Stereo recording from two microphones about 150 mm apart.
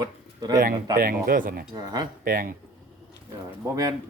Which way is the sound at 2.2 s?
70° right (ahead or behind).